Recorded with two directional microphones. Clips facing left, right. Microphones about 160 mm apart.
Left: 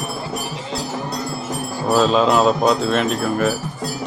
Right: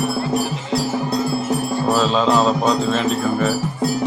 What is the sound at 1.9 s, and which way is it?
Speech, 5° left (ahead or behind).